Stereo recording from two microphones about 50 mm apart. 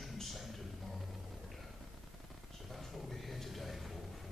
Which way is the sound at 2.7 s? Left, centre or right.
Centre.